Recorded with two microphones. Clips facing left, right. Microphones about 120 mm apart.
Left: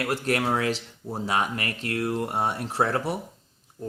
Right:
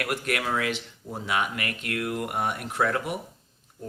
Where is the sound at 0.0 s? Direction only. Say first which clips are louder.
Left 3 dB; 30° left (ahead or behind).